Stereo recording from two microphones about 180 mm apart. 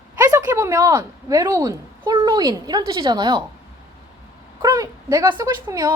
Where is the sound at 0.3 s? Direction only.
20° right (ahead or behind).